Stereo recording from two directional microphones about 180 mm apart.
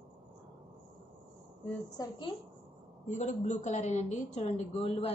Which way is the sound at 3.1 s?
40° left (ahead or behind).